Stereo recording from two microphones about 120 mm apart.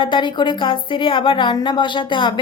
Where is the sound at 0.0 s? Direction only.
40° left (ahead or behind).